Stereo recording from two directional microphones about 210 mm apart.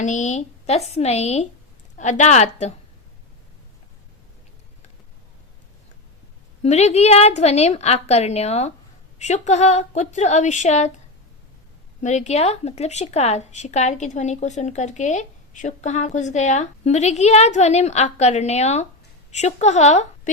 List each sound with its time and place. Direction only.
0.0 s speech: 35° left (ahead or behind)
6.6 s speech: 30° left (ahead or behind)
12.0 s speech: 35° left (ahead or behind)